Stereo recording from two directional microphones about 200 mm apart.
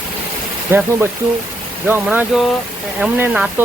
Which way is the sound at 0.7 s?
10° right (ahead or behind).